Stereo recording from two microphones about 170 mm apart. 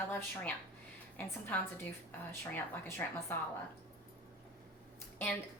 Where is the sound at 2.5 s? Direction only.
15° left (ahead or behind).